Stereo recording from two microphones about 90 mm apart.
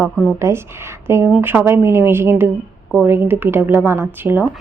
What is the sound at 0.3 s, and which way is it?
A woman's voice, 30° right (ahead or behind).